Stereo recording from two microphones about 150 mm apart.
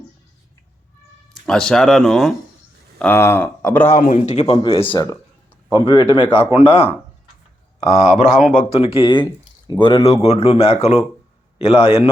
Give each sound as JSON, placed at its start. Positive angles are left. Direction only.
{"t": 1.5, "sound": "speech", "side_deg": 5}
{"t": 3.0, "sound": "speech", "side_deg": 15}
{"t": 3.9, "sound": "a man's voice", "side_deg": 60}
{"t": 4.2, "sound": "speech", "side_deg": 40}
{"t": 4.9, "sound": "speech", "side_deg": 25}
{"t": 8.5, "sound": "speech", "side_deg": 40}